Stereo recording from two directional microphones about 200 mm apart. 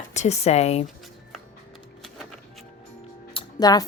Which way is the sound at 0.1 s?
35° left (ahead or behind).